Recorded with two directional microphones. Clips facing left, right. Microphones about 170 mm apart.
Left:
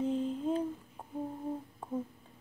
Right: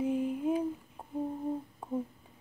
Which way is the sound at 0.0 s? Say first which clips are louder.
Right 2 dB; 10° right (ahead or behind).